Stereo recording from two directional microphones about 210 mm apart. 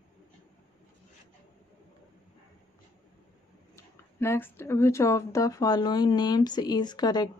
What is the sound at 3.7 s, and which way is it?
Speech, 10° left (ahead or behind).